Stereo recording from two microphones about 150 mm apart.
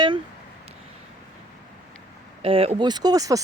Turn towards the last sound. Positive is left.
turn(degrees=-25)  # may be behind; listen again after turning